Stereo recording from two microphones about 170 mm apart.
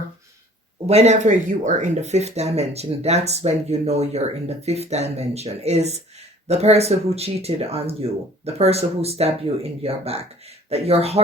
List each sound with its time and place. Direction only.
0.9 s speech: 40° right (ahead or behind)